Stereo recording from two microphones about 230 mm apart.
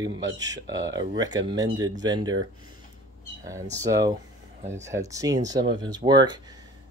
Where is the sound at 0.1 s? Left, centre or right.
Right.